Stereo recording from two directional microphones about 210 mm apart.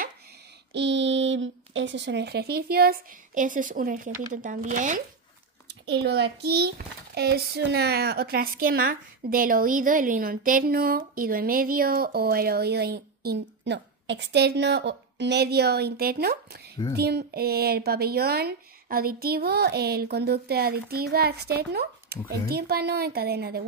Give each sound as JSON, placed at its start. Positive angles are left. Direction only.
{"t": 0.7, "sound": "a woman's voice", "side_deg": -55}
{"t": 5.9, "sound": "a woman's voice", "side_deg": -50}